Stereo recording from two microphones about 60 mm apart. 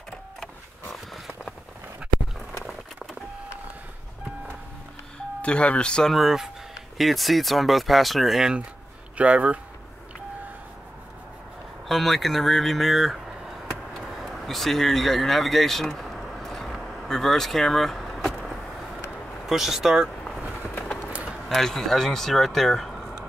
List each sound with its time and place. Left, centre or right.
5.4 s speech: left
6.1 s speech: centre
9.1 s speech: right
11.9 s speech: centre
14.1 s a sound: centre
19.4 s speech: centre
21.1 s a sound: right
21.5 s speech: centre